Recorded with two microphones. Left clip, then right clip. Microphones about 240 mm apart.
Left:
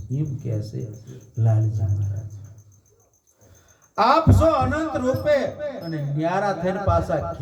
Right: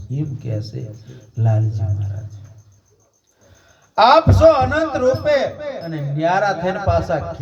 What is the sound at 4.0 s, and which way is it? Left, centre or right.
A man's voice, right.